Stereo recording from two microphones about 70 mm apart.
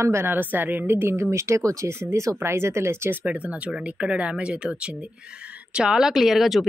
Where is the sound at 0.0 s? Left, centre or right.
Right.